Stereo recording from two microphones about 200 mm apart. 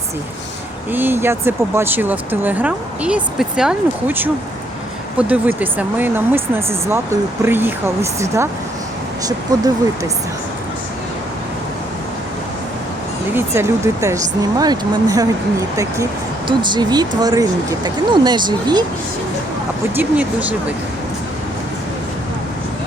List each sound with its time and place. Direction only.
0.9 s speech: 10° right (ahead or behind)
13.3 s speech: 15° right (ahead or behind)
20.0 s speech: 10° right (ahead or behind)